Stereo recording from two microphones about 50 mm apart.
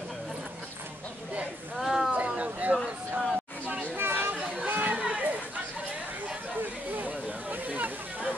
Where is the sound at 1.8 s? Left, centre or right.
Centre.